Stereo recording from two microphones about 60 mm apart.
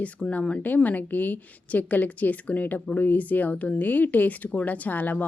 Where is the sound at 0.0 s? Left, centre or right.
Left.